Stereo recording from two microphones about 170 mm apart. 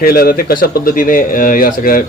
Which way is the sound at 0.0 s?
60° left (ahead or behind).